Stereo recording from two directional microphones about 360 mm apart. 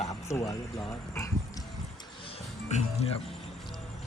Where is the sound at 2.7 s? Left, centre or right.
Centre.